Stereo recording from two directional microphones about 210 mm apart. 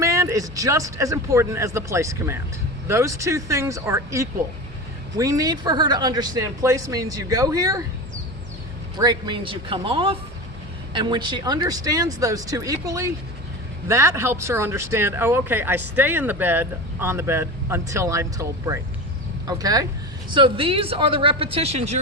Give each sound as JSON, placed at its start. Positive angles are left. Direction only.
{"t": 0.0, "sound": "speech", "side_deg": -15}
{"t": 9.0, "sound": "speech", "side_deg": -20}